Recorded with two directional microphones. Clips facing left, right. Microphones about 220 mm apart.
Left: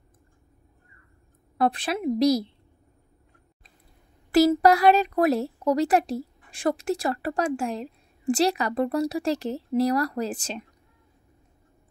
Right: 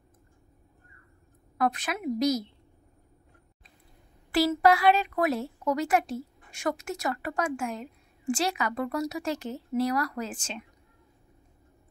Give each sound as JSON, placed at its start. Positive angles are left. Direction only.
{"t": 1.6, "sound": "a woman's voice", "side_deg": 30}
{"t": 4.3, "sound": "a woman's voice", "side_deg": 40}